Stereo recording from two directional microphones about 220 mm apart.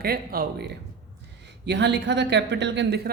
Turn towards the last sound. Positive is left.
turn(degrees=-50)  # may be behind; listen again after turning